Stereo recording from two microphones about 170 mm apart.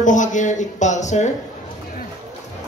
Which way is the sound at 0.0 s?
45° left (ahead or behind).